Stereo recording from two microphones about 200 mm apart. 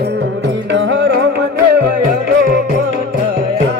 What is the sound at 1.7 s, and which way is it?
Music, 50° right (ahead or behind).